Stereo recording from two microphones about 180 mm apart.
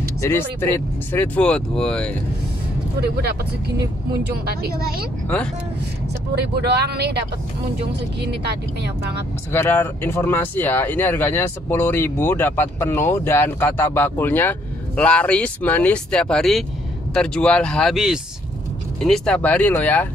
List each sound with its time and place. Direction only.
0.2 s speech: 15° left (ahead or behind)
3.2 s speech: 65° right (ahead or behind)
6.3 s speech: 65° right (ahead or behind)
9.5 s speech: 10° left (ahead or behind)